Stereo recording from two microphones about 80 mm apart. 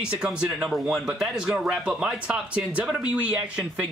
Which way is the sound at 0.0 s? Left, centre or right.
Centre.